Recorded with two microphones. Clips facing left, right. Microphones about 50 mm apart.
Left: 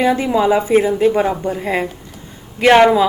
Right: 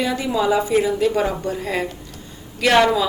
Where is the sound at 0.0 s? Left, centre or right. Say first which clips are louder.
Left 6 dB; left.